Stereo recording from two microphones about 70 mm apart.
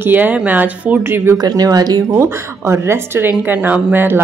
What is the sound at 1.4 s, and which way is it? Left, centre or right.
Speech, right.